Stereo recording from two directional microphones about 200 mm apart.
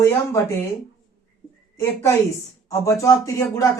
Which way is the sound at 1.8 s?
10° left (ahead or behind).